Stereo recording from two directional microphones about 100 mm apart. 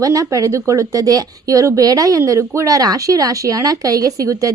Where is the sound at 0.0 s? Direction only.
35° right (ahead or behind).